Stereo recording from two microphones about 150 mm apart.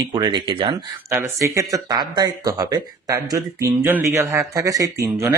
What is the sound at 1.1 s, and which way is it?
Speech, 20° right (ahead or behind).